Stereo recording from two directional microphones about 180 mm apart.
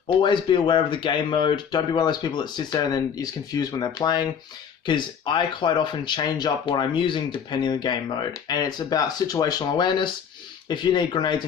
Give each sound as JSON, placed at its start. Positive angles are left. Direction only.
{"t": 0.2, "sound": "speech", "side_deg": 25}